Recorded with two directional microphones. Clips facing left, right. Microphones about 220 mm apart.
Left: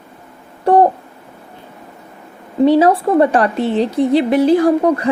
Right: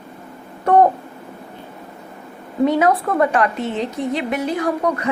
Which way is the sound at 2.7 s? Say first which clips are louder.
Left 6 dB; 30° left (ahead or behind).